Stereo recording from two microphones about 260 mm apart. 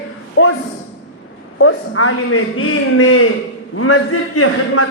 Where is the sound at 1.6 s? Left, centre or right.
Left.